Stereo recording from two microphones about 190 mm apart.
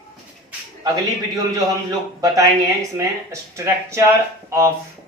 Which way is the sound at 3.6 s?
15° right (ahead or behind).